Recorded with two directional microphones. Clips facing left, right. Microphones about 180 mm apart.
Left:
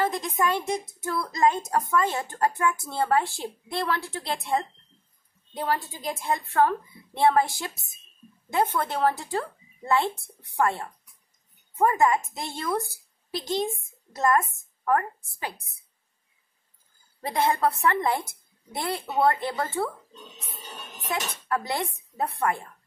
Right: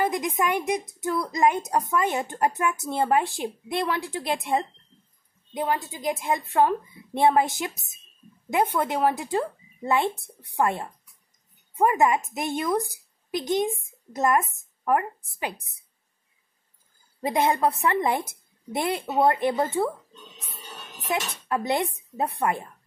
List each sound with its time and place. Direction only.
0.0 s a woman's voice: 15° right (ahead or behind)
17.2 s a woman's voice: 20° right (ahead or behind)
21.1 s a woman's voice: 20° right (ahead or behind)